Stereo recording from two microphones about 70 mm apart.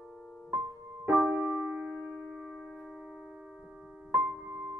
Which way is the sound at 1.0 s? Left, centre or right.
Right.